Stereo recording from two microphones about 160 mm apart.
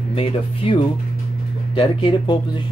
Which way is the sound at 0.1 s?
35° left (ahead or behind).